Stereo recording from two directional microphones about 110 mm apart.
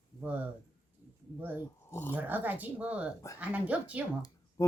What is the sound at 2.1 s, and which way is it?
Speech, 15° right (ahead or behind).